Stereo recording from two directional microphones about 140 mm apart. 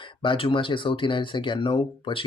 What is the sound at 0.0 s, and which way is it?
Speech, 35° left (ahead or behind).